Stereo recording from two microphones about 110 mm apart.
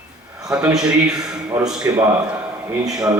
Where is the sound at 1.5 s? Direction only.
15° right (ahead or behind).